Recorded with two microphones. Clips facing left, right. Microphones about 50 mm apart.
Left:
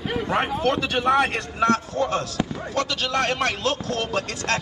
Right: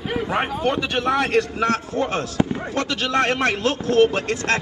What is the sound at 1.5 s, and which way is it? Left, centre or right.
A man's voice, right.